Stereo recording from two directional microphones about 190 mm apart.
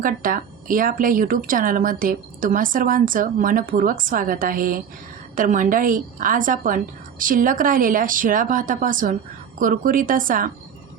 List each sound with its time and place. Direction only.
0.0 s speech: 45° right (ahead or behind)